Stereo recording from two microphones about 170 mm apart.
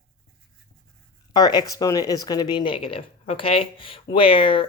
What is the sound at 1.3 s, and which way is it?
Speech, 25° left (ahead or behind).